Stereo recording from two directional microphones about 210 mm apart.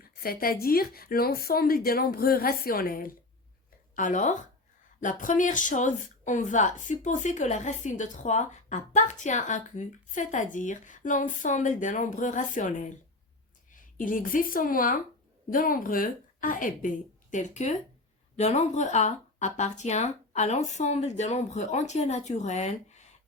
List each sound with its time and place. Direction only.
0.0 s a woman's voice: 45° left (ahead or behind)